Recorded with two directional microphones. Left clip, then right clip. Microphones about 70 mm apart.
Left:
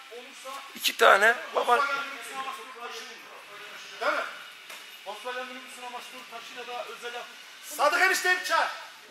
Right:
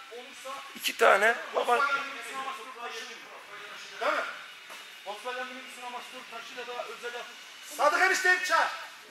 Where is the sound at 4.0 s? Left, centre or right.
Left.